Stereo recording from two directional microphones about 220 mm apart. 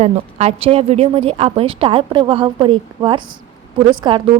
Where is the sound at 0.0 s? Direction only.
30° right (ahead or behind).